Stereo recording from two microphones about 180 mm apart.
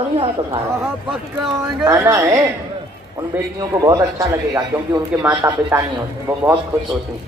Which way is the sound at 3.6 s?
20° right (ahead or behind).